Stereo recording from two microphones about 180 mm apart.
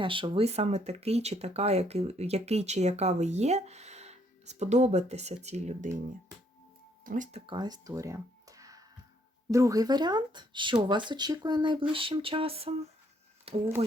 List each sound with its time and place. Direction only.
0.0 s speech: 30° right (ahead or behind)
7.0 s speech: 45° right (ahead or behind)